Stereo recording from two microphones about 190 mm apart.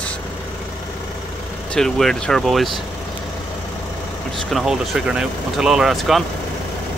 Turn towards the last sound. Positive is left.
turn(degrees=0)  # may be behind; listen again after turning